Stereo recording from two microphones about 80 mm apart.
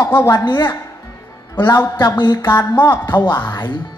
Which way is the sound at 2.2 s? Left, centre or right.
Left.